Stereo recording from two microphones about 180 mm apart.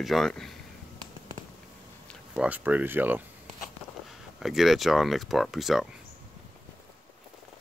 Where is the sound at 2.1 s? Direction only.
5° right (ahead or behind).